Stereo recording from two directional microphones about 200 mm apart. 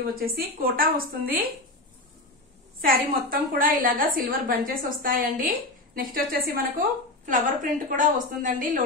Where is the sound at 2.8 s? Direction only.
45° right (ahead or behind).